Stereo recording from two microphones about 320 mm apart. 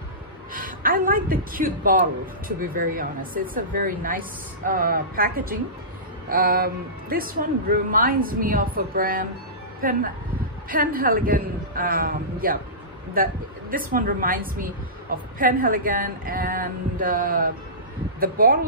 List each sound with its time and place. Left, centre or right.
0.5 s a woman's voice: right